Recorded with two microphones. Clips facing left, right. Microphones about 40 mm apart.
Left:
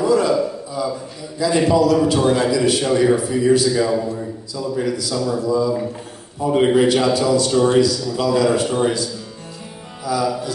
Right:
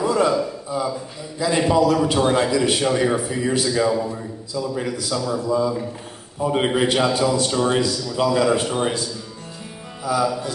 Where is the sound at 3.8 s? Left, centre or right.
Centre.